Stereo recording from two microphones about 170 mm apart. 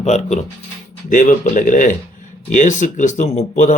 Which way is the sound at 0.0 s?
40° left (ahead or behind).